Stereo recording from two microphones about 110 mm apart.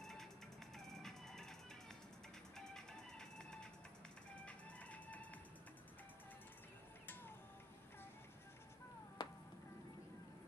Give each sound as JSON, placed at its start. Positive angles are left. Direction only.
{"t": 0.0, "sound": "music", "side_deg": 5}
{"t": 0.7, "sound": "fowl", "side_deg": 5}
{"t": 2.5, "sound": "music", "side_deg": 5}
{"t": 9.2, "sound": "music", "side_deg": 40}